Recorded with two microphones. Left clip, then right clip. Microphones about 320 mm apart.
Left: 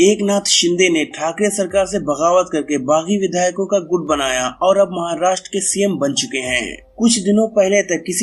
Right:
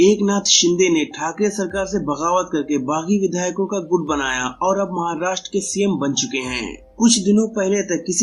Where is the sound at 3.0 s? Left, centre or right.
Left.